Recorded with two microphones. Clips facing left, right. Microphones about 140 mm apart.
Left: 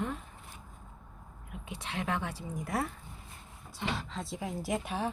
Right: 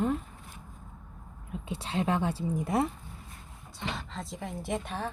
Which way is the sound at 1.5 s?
30° right (ahead or behind).